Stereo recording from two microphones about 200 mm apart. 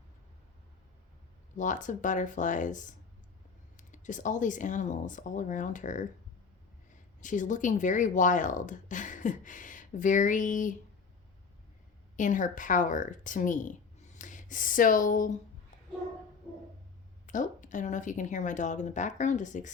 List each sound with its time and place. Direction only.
1.5 s speech: 40° left (ahead or behind)
7.2 s speech: 40° left (ahead or behind)
12.1 s speech: 40° left (ahead or behind)
17.2 s speech: 40° left (ahead or behind)